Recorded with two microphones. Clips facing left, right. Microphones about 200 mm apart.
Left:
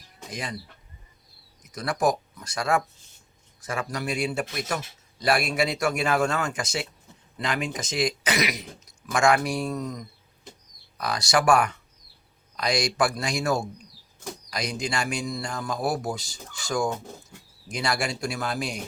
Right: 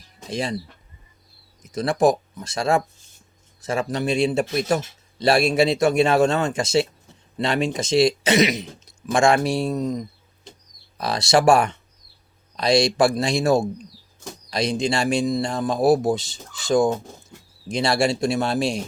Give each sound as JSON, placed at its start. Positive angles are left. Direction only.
{"t": 0.3, "sound": "speech", "side_deg": -30}
{"t": 1.6, "sound": "speech", "side_deg": -25}